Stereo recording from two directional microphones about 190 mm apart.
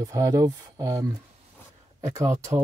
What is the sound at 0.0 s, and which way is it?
Speech, 15° right (ahead or behind).